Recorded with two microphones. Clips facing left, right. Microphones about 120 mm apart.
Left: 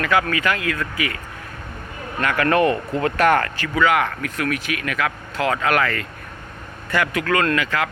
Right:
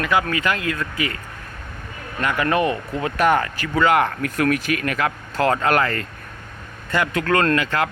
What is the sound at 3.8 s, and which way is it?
Speech, 35° right (ahead or behind).